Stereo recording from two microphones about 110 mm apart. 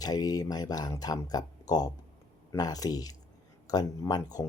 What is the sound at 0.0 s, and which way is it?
Speech, 35° left (ahead or behind).